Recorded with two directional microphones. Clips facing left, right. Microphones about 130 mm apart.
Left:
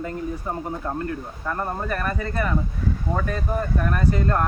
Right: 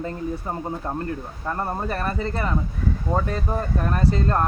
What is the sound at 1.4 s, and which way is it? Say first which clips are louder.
Speech: right 1 dB; 30° right (ahead or behind).